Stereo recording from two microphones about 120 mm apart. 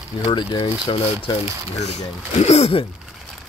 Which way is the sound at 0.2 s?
45° left (ahead or behind).